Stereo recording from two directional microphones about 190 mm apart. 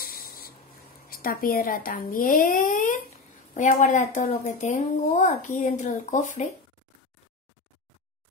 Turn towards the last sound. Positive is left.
turn(degrees=40)  # may be behind; listen again after turning